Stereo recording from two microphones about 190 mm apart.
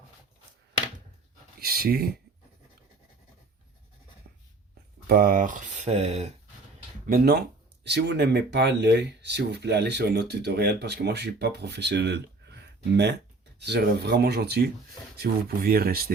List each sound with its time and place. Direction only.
1.5 s speech: 50° right (ahead or behind)
5.0 s speech: 50° right (ahead or behind); by 6.3 s 35° right (ahead or behind)
7.1 s speech: 55° right (ahead or behind)
13.6 s speech: 60° right (ahead or behind)